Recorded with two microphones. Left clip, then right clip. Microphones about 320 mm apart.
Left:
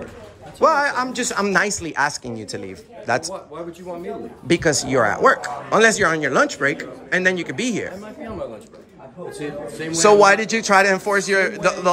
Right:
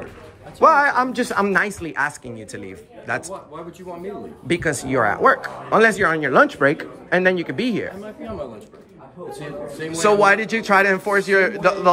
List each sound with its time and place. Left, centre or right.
0.6 s speech: centre
4.5 s speech: centre
9.4 s speech: centre